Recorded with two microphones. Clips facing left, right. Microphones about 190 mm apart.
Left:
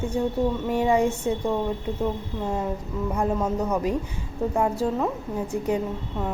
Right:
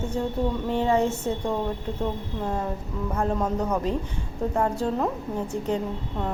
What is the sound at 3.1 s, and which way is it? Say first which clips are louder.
A woman's voice: left 1 dB; 10° left (ahead or behind).